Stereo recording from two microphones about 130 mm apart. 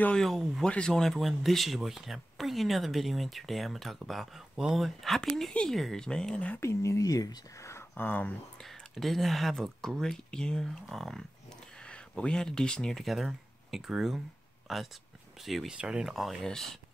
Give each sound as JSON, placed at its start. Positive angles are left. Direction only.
{"t": 0.0, "sound": "speech", "side_deg": 5}
{"t": 6.6, "sound": "speech", "side_deg": 20}
{"t": 8.9, "sound": "speech", "side_deg": 0}